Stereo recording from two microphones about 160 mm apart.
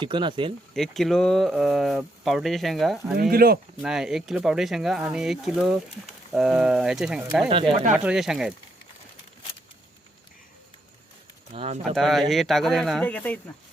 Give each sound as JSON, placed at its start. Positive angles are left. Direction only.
{"t": 0.0, "sound": "speech", "side_deg": -30}
{"t": 0.7, "sound": "speech", "side_deg": 0}
{"t": 3.2, "sound": "speech", "side_deg": -70}
{"t": 3.8, "sound": "speech", "side_deg": -5}
{"t": 11.5, "sound": "speech", "side_deg": -40}
{"t": 11.8, "sound": "speech", "side_deg": 0}